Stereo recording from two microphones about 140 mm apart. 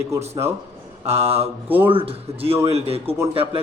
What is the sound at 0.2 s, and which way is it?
Speech, 50° right (ahead or behind).